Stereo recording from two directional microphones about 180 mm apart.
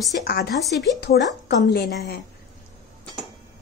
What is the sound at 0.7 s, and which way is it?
A woman's voice, 65° left (ahead or behind).